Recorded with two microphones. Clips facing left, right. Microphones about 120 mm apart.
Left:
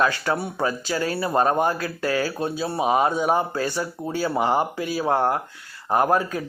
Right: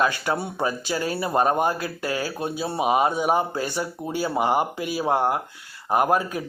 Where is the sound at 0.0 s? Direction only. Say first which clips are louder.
Left 1 dB; 20° right (ahead or behind).